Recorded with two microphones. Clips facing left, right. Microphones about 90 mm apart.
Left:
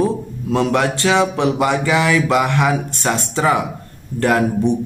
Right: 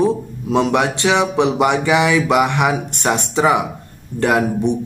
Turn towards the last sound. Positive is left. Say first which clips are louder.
# even
turn(degrees=-15)  # may be behind; listen again after turning